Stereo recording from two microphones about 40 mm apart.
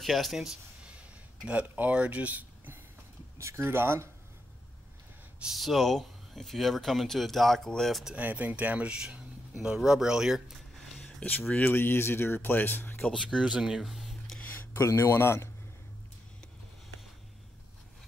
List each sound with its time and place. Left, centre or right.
0.0 s speech: centre
1.5 s speech: right
3.5 s speech: right
5.5 s speech: centre
8.2 s speech: right
8.8 s speech: right
9.8 s speech: centre
11.2 s speech: left
13.2 s speech: right
13.8 s a sound: centre
14.7 s speech: left